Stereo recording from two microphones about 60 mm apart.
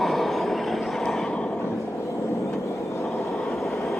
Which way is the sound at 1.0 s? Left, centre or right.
Centre.